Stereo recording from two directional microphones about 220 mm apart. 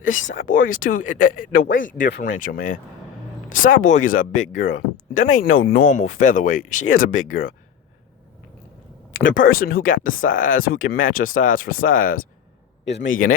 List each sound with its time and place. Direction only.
0.3 s speech: 40° left (ahead or behind)
9.3 s speech: 40° left (ahead or behind)
12.8 s a man's voice: 55° left (ahead or behind)